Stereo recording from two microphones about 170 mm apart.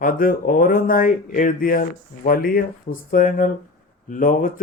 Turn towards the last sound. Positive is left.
turn(degrees=55)  # may be behind; listen again after turning